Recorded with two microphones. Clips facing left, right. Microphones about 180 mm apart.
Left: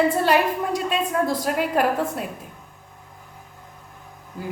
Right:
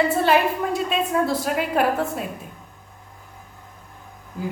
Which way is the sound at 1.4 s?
Centre (ahead or behind).